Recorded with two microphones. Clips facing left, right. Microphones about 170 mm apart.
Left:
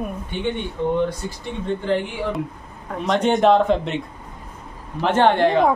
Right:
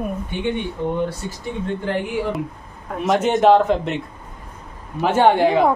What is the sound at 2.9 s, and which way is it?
A woman's voice, 5° right (ahead or behind).